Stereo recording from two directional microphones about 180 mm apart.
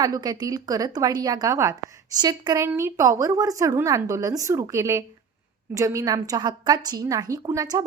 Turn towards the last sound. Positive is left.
turn(degrees=-20)  # may be behind; listen again after turning